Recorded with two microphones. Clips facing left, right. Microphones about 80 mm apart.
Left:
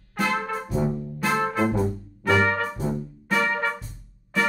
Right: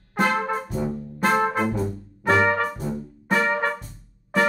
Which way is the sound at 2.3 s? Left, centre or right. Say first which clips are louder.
Right 2 dB; right.